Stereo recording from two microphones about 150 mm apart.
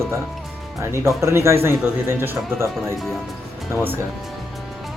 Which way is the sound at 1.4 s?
15° right (ahead or behind).